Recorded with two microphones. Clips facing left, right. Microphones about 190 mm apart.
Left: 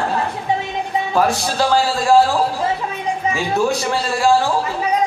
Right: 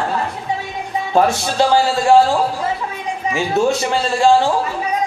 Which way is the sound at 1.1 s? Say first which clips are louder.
Right 3 dB; 25° right (ahead or behind).